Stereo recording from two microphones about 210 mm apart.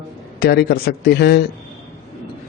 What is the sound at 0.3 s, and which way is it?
A man's voice, 50° left (ahead or behind).